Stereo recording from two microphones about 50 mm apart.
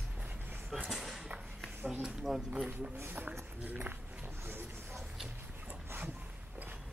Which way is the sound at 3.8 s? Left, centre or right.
Right.